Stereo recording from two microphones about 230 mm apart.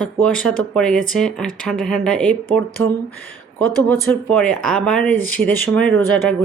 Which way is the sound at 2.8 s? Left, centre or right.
Right.